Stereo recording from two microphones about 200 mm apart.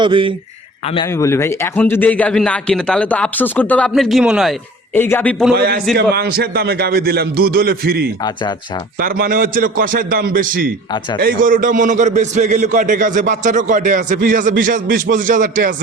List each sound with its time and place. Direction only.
0.0 s speech: 25° right (ahead or behind)
1.0 s a man's voice: 15° left (ahead or behind); by 4.5 s 5° right (ahead or behind)
4.9 s a man's voice: 10° left (ahead or behind)
5.5 s a man's voice: 50° right (ahead or behind)